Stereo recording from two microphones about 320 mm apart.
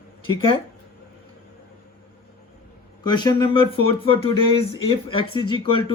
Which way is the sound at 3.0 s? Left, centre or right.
Centre.